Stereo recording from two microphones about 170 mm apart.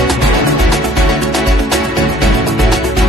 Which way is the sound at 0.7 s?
Centre (ahead or behind).